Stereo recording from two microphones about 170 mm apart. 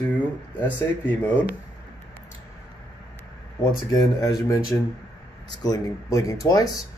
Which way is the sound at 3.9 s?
20° left (ahead or behind).